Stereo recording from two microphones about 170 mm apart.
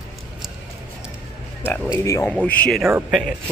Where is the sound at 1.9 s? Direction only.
20° left (ahead or behind); by 3.5 s centre (ahead or behind).